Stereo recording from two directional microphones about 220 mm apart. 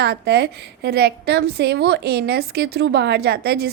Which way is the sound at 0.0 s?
50° right (ahead or behind).